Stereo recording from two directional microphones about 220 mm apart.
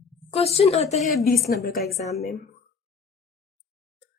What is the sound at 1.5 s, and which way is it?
Speech, 40° left (ahead or behind).